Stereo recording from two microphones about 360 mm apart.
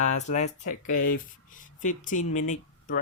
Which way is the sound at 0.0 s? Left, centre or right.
Centre.